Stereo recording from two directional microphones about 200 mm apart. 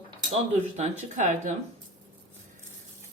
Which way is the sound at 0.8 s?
35° right (ahead or behind).